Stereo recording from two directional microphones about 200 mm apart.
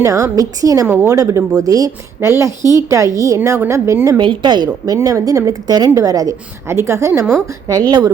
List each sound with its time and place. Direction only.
0.0 s a woman's voice: 15° right (ahead or behind)